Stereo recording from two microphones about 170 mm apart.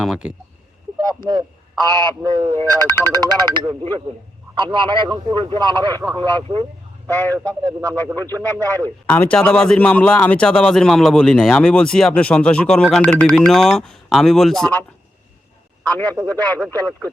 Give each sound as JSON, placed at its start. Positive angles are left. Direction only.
{"t": 0.0, "sound": "speech", "side_deg": -5}
{"t": 1.2, "sound": "speech", "side_deg": -25}
{"t": 2.8, "sound": "speech", "side_deg": 15}
{"t": 3.2, "sound": "speech", "side_deg": -25}
{"t": 7.9, "sound": "speech", "side_deg": 10}
{"t": 8.2, "sound": "speech", "side_deg": -20}
{"t": 8.6, "sound": "speech", "side_deg": 10}
{"t": 15.9, "sound": "speech", "side_deg": 10}